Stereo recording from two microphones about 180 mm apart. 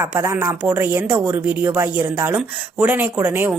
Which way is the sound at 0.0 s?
15° right (ahead or behind).